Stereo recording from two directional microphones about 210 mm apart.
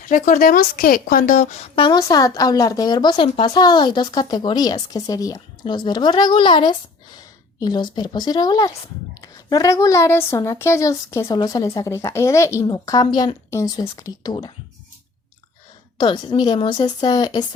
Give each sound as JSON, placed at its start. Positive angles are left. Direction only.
{"t": 0.0, "sound": "a woman's voice", "side_deg": 40}
{"t": 16.0, "sound": "a woman's voice", "side_deg": 20}